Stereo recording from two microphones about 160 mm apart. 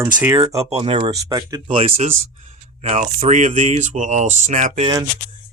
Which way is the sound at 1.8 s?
40° right (ahead or behind).